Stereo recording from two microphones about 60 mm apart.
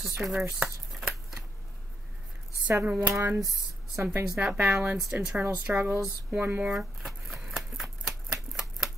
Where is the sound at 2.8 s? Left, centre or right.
Right.